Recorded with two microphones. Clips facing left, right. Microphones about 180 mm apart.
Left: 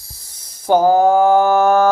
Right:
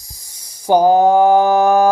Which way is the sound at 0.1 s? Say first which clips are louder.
Even; 15° right (ahead or behind).